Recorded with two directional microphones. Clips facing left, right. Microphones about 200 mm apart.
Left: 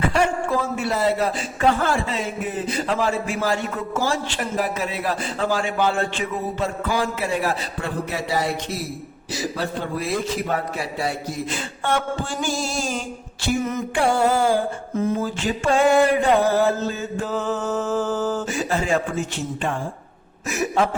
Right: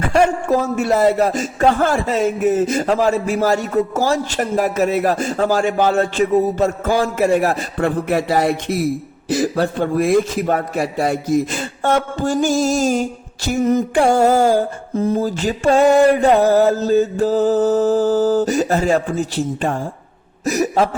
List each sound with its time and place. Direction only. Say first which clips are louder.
0.1 s a man's voice: right 6 dB; 45° right (ahead or behind)